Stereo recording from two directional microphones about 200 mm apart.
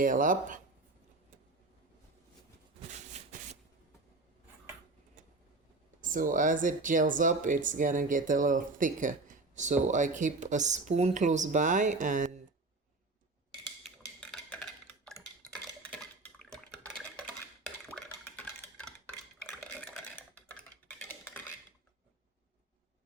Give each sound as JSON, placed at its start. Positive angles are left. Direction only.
{"t": 0.0, "sound": "speech", "side_deg": -40}
{"t": 2.9, "sound": "rub", "side_deg": -35}
{"t": 6.0, "sound": "speech", "side_deg": -40}
{"t": 13.8, "sound": "a sound", "side_deg": 0}